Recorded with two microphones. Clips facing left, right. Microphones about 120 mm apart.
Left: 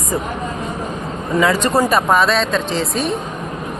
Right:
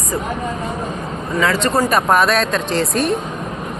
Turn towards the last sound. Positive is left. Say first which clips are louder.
# right 2 dB
turn(degrees=0)  # may be behind; listen again after turning